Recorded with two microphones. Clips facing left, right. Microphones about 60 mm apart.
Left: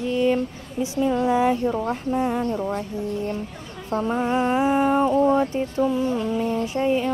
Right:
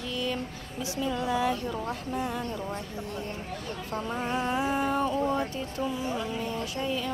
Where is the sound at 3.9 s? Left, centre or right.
Left.